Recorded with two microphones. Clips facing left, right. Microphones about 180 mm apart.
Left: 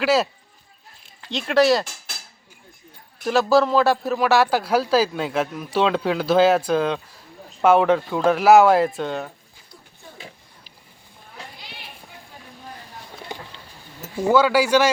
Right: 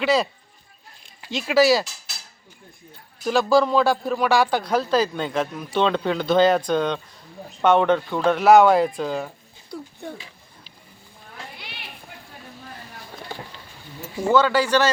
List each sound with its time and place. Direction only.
0.0 s speech: 5° left (ahead or behind)
3.2 s speech: centre (ahead or behind)
9.7 s a sound: 60° right (ahead or behind)
10.2 s a sound: 45° left (ahead or behind)
11.5 s clip-clop: 65° right (ahead or behind)
14.3 s speech: 10° left (ahead or behind)